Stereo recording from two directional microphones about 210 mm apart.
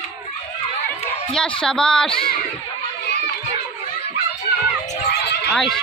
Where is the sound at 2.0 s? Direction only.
25° left (ahead or behind).